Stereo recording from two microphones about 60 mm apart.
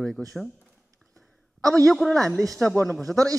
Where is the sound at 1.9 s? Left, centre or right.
Centre.